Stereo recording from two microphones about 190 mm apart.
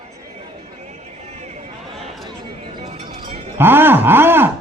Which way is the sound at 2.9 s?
35° right (ahead or behind).